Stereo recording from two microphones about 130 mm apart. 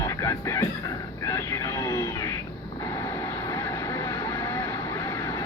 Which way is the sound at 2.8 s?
25° left (ahead or behind).